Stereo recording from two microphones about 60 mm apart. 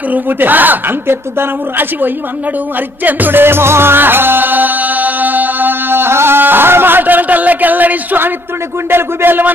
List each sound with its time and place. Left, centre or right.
0.1 s a woman's voice: right
3.0 s music: right
8.9 s a woman's voice: right